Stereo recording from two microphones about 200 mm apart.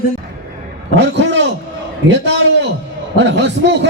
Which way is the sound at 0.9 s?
60° right (ahead or behind).